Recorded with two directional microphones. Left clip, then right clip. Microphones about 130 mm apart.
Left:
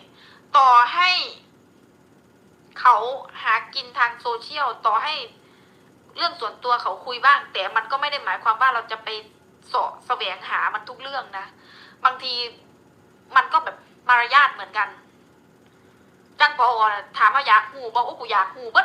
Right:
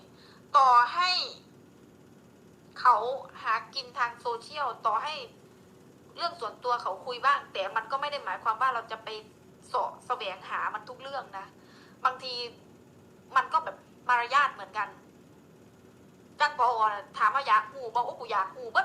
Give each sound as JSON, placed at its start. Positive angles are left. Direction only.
{"t": 0.5, "sound": "a woman's voice", "side_deg": 15}
{"t": 2.7, "sound": "a woman's voice", "side_deg": 15}
{"t": 16.4, "sound": "a woman's voice", "side_deg": 15}